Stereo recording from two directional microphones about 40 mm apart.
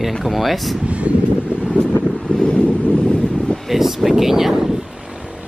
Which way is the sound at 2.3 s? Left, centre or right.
Left.